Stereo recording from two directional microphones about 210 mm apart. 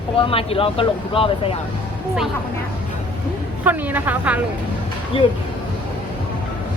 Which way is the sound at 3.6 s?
10° right (ahead or behind).